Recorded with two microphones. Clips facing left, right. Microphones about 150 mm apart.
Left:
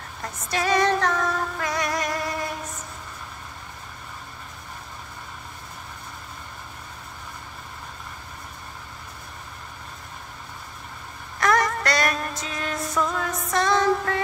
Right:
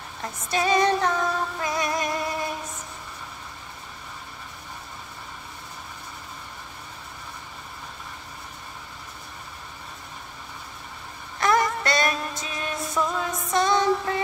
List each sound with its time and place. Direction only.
0.5 s music: 20° right (ahead or behind)
11.3 s a sound: 25° right (ahead or behind)
12.4 s music: 20° right (ahead or behind)